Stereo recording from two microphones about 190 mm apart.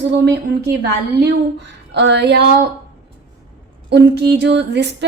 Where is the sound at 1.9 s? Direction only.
65° right (ahead or behind).